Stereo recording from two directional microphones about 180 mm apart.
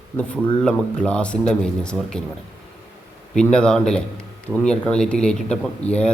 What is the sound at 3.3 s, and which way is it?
A man's voice, 5° left (ahead or behind).